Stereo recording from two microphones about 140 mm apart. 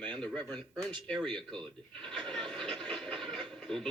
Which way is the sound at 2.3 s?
5° left (ahead or behind).